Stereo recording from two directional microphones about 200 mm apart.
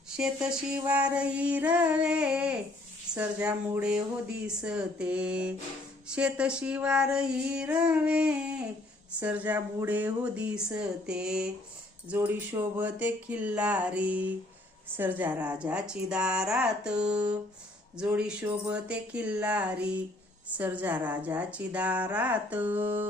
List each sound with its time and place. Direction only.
0.1 s speech: 5° right (ahead or behind)